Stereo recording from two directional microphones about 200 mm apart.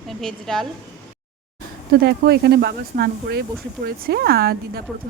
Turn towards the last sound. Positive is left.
turn(degrees=-50)  # may be behind; listen again after turning